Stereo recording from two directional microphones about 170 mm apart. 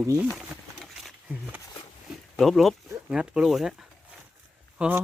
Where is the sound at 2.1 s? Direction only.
Centre (ahead or behind).